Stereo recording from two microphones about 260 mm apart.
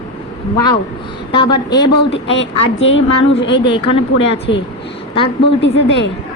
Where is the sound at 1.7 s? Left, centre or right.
Left.